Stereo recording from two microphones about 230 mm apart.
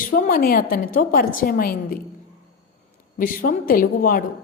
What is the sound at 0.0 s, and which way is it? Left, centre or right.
A woman's voice, left.